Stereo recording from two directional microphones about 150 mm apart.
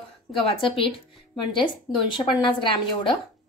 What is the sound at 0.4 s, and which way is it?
A woman's voice, 35° left (ahead or behind).